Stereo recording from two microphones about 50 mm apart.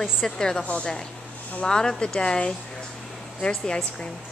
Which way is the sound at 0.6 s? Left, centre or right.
Left.